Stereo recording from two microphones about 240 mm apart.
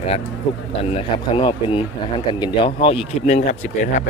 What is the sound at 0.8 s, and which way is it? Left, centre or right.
Speech, left.